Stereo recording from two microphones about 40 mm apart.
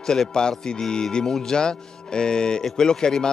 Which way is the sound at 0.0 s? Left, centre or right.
Centre.